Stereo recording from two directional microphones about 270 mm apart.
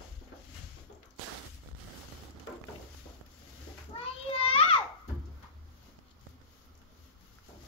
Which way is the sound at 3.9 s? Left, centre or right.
Left.